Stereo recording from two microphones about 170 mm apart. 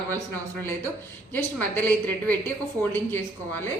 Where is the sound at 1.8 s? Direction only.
10° left (ahead or behind).